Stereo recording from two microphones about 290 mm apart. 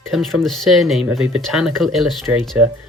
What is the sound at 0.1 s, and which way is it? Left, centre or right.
Speech, centre.